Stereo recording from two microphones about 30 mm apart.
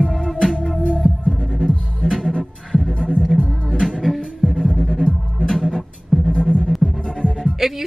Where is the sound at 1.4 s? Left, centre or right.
Left.